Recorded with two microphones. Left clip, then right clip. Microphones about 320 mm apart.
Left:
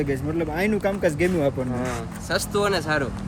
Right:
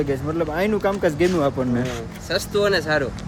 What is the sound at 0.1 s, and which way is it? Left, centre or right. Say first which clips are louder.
A man's voice: right 3 dB; centre.